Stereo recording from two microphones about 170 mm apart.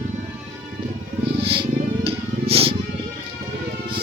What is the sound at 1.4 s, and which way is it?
Wild animals, 35° right (ahead or behind).